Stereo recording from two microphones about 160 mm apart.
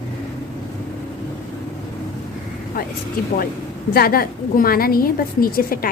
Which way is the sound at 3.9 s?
70° left (ahead or behind).